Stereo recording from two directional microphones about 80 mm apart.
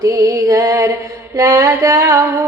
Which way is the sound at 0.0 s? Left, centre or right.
Right.